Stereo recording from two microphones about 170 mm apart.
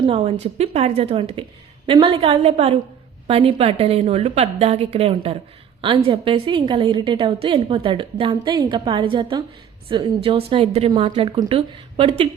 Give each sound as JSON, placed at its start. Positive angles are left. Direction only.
{"t": 0.0, "sound": "a woman's voice", "side_deg": -30}